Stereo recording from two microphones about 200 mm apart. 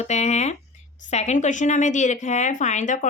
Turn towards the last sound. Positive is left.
turn(degrees=40)  # may be behind; listen again after turning